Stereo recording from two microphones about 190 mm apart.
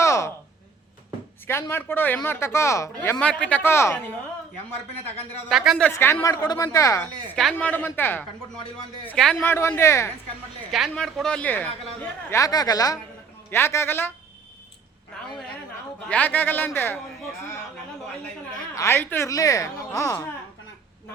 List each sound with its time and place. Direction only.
0.0 s a sound: 15° left (ahead or behind)
1.5 s speech: 15° left (ahead or behind)
5.5 s speech: centre (ahead or behind)
5.9 s speech: 10° left (ahead or behind)
10.7 s speech: centre (ahead or behind)
16.0 s speech: 10° left (ahead or behind)
18.7 s speech: 15° left (ahead or behind)